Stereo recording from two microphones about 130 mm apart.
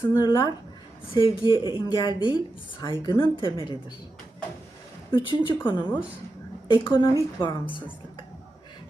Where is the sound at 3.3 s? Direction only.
40° left (ahead or behind).